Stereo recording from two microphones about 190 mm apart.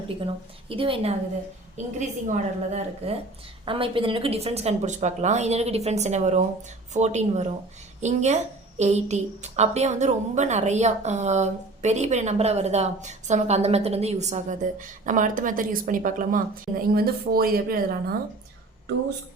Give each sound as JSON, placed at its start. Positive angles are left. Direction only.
{"t": 0.7, "sound": "a woman's voice", "side_deg": -30}
{"t": 1.7, "sound": "a woman's voice", "side_deg": -40}